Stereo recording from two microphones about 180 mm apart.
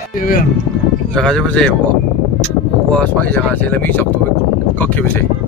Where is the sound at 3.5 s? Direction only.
10° left (ahead or behind).